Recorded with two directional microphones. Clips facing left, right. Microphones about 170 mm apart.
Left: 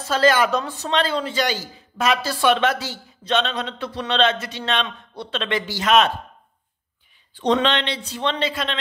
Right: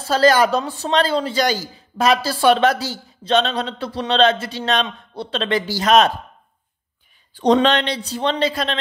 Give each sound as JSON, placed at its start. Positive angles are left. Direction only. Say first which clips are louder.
{"t": 0.0, "sound": "speech", "louder": "right 3 dB", "side_deg": -35}
{"t": 7.3, "sound": "speech", "louder": "right 4 dB", "side_deg": -40}